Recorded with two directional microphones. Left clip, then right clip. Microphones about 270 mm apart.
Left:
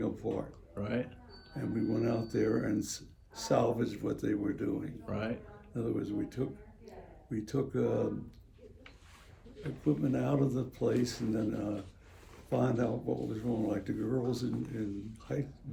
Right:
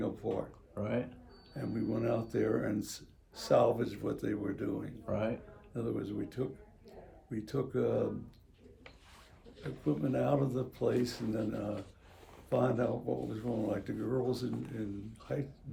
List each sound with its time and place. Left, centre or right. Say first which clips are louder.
0.2 s speech: even; centre
9.8 s speech: even; centre